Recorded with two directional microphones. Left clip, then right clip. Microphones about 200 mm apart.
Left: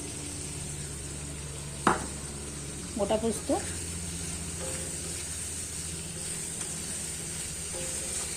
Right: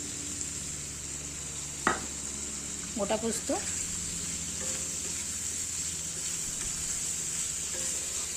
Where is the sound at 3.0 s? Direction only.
20° right (ahead or behind).